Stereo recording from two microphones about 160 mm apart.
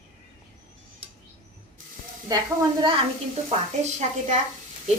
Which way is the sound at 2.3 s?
20° right (ahead or behind).